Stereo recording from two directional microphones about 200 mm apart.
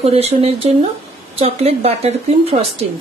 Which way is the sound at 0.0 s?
30° right (ahead or behind).